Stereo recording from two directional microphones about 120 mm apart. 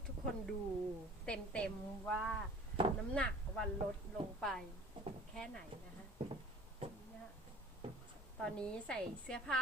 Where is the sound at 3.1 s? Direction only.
10° left (ahead or behind).